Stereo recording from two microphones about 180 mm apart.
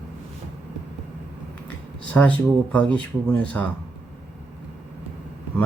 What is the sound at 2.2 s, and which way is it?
Speech, 5° left (ahead or behind).